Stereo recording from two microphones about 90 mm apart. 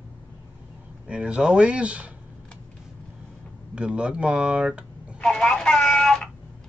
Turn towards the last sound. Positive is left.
turn(degrees=5)  # may be behind; listen again after turning